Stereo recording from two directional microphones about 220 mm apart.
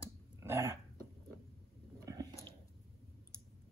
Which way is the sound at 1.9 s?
15° right (ahead or behind).